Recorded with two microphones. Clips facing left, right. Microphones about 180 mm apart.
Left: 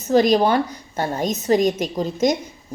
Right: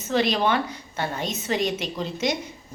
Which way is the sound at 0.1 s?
40° left (ahead or behind).